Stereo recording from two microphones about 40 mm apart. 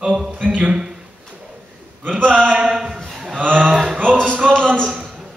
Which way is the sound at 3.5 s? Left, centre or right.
Right.